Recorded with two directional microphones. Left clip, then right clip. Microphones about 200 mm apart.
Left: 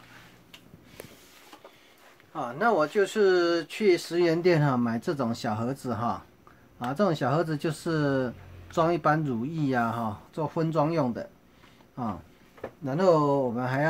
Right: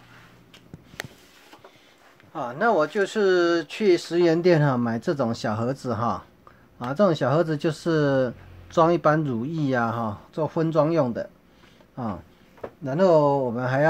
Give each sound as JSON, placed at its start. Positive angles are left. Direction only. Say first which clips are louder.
{"t": 2.3, "sound": "speech", "louder": "right 3 dB", "side_deg": -35}
{"t": 12.8, "sound": "speech", "louder": "right 4 dB", "side_deg": -30}